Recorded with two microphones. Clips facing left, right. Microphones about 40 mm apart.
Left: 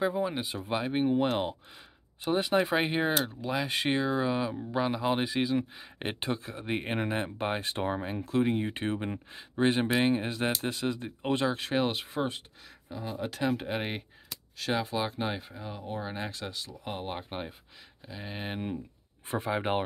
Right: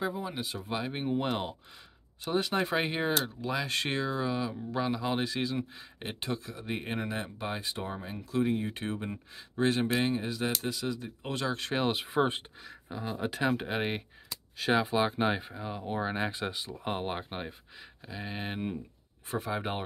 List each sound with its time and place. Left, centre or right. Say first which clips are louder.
0.0 s speech: left 5 dB; left
5.9 s speech: left 3 dB; left
8.5 s speech: left 2 dB; left
11.4 s speech: right 1 dB; centre
12.2 s speech: right 5 dB; right
12.8 s speech: right 1 dB; centre
17.3 s speech: left 1 dB; centre
19.2 s speech: left 2 dB; left
19.5 s speech: left 6 dB; left